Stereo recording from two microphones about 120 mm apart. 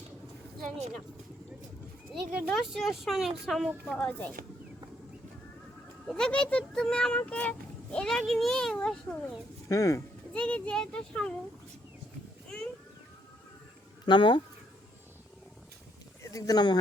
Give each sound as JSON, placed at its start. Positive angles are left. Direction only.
{"t": 2.1, "sound": "speech", "side_deg": 0}
{"t": 3.9, "sound": "a child's voice", "side_deg": 10}
{"t": 6.1, "sound": "a child's voice", "side_deg": 5}
{"t": 9.6, "sound": "speech", "side_deg": 25}
{"t": 10.3, "sound": "a child's voice", "side_deg": 10}
{"t": 14.0, "sound": "speech", "side_deg": 40}
{"t": 16.2, "sound": "speech", "side_deg": 30}